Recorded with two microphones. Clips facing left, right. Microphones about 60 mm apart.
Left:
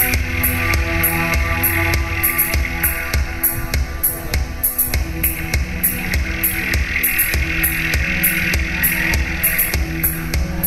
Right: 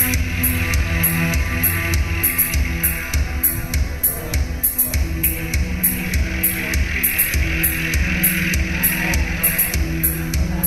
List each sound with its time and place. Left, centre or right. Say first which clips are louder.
0.0 s music: left 2 dB; left
6.0 s music: left 2 dB; left